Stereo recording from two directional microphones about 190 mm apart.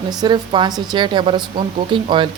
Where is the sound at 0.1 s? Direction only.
20° right (ahead or behind).